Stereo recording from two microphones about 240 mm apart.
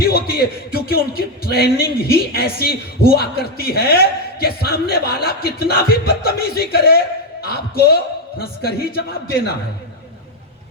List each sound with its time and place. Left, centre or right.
0.0 s speech: left